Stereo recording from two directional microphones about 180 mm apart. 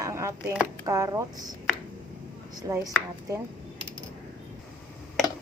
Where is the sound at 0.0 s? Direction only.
15° right (ahead or behind).